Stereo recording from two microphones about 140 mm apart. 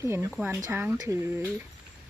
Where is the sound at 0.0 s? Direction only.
20° right (ahead or behind).